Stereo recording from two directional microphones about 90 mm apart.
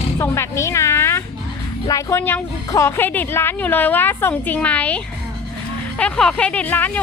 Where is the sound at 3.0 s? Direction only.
20° left (ahead or behind).